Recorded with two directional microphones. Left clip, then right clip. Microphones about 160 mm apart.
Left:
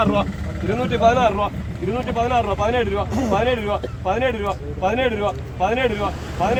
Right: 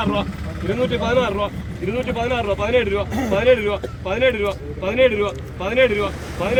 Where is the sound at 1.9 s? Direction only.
15° left (ahead or behind).